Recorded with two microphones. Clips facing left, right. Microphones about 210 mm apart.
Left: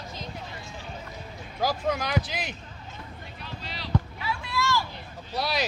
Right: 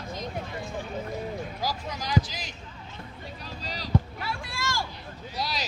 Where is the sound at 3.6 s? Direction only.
40° right (ahead or behind).